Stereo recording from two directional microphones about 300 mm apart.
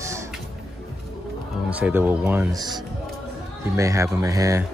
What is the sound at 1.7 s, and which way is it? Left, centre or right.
Speech, centre.